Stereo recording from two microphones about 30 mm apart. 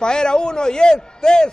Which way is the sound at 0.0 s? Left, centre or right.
Left.